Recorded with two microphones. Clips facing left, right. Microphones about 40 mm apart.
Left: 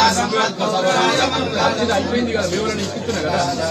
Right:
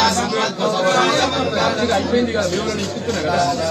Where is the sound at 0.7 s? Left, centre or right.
Right.